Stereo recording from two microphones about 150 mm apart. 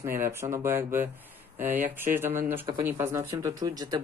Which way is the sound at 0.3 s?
15° right (ahead or behind).